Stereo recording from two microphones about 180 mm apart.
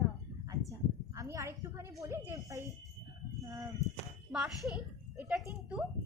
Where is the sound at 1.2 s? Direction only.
15° right (ahead or behind).